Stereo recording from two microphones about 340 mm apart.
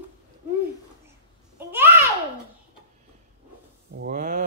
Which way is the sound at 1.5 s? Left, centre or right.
Centre.